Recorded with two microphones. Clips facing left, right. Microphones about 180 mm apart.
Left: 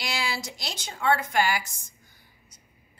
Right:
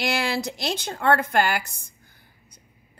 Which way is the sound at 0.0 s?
60° right (ahead or behind).